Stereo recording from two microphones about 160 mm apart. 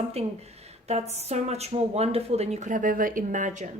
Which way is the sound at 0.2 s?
40° right (ahead or behind).